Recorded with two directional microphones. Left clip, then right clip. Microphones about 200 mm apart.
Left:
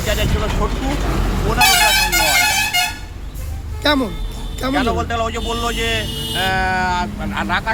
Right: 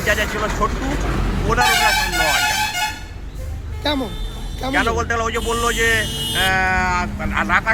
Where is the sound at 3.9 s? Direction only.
55° left (ahead or behind).